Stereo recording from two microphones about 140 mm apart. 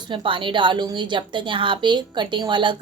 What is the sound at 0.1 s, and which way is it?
A woman's voice, 35° right (ahead or behind).